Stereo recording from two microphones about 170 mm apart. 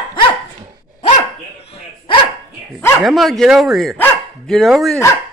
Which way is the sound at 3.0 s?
Centre (ahead or behind).